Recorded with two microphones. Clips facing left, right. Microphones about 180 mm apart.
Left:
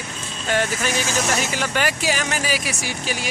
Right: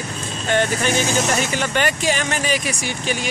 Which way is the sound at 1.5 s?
5° left (ahead or behind).